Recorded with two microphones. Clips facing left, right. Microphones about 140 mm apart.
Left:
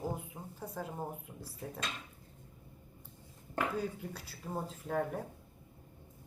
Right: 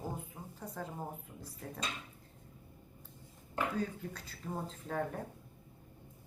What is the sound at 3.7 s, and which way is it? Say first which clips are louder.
A woman's voice: even; 10° left (ahead or behind).